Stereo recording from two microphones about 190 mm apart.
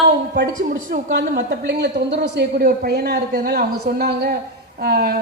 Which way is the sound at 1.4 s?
65° right (ahead or behind).